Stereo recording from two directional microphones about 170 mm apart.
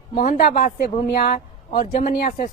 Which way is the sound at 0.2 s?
55° left (ahead or behind).